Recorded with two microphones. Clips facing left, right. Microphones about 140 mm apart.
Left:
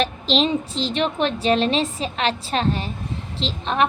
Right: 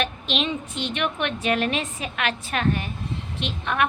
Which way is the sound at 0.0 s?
35° left (ahead or behind).